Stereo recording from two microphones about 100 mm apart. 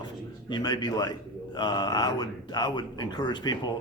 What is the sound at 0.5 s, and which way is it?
Speech, 45° left (ahead or behind).